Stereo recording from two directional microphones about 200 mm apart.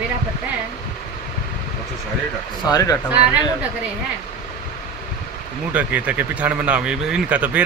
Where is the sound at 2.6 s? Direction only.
20° left (ahead or behind).